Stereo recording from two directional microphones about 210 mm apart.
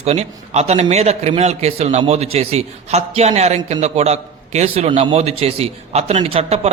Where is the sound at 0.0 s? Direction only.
30° right (ahead or behind).